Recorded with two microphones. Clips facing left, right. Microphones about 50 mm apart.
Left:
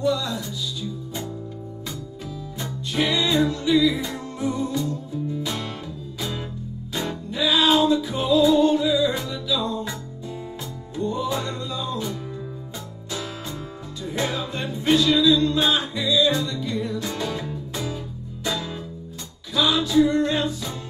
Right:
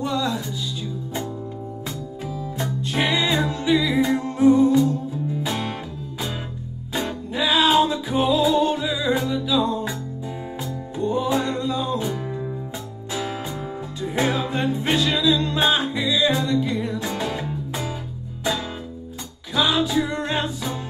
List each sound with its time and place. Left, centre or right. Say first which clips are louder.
0.0 s music: even; right
3.1 s music: left 2 dB; centre
4.0 s music: right 10 dB; right
9.2 s music: right 4 dB; centre
9.6 s music: right 4 dB; right
11.0 s music: right 3 dB; right
13.1 s music: right 4 dB; right
15.7 s music: right 1 dB; centre
19.5 s music: left 1 dB; centre
20.2 s music: even; right